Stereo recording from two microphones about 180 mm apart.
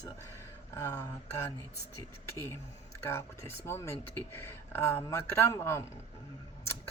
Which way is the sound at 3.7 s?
15° left (ahead or behind).